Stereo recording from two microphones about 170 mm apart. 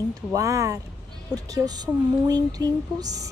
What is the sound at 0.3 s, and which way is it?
Speech, 20° right (ahead or behind).